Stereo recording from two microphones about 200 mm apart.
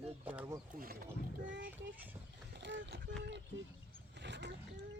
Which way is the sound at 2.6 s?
60° right (ahead or behind).